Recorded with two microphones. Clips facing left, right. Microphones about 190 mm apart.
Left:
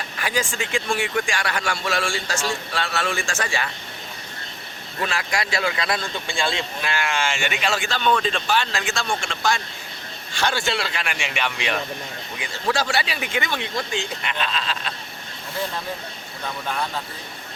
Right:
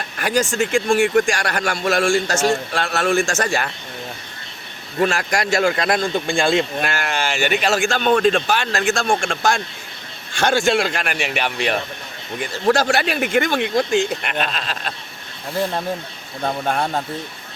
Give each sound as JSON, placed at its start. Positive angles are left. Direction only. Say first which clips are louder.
{"t": 0.2, "sound": "speech", "louder": "right 7 dB", "side_deg": -45}
{"t": 4.9, "sound": "speech", "louder": "right 7 dB", "side_deg": -45}
{"t": 6.9, "sound": "speech", "louder": "right 2 dB", "side_deg": -40}
{"t": 16.4, "sound": "speech", "louder": "right 7 dB", "side_deg": -50}